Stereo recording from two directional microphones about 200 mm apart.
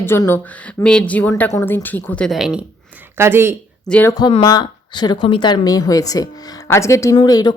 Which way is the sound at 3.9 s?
10° left (ahead or behind).